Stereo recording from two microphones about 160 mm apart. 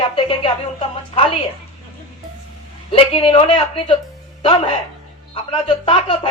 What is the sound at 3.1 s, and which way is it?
Speech, 35° left (ahead or behind).